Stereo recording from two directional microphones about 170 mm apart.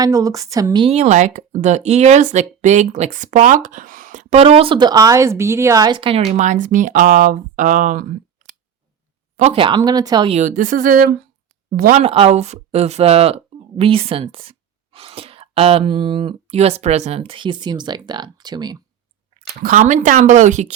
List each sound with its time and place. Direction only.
0.0 s a woman's voice: 20° right (ahead or behind); by 8.0 s 50° right (ahead or behind)
9.4 s speech: 35° right (ahead or behind)
10.2 s a woman's voice: 40° right (ahead or behind)
12.0 s speech: 35° right (ahead or behind)
19.4 s a woman's voice: 50° right (ahead or behind)